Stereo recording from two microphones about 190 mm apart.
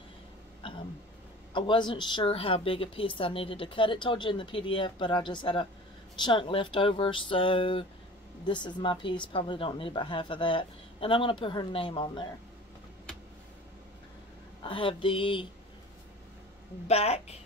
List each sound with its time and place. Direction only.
0.6 s throat clearing: 25° left (ahead or behind)
1.5 s a woman's voice: 25° left (ahead or behind)
14.6 s a woman's voice: 25° left (ahead or behind)
16.8 s speech: 35° left (ahead or behind)